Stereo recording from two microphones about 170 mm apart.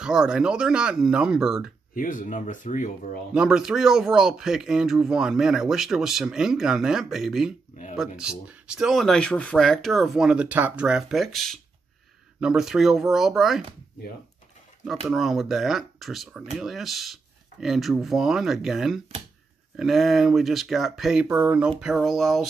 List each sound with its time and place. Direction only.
0.0 s speech: 5° right (ahead or behind)
2.0 s speech: 50° left (ahead or behind)
3.3 s speech: 5° right (ahead or behind)
15.0 s speech: centre (ahead or behind)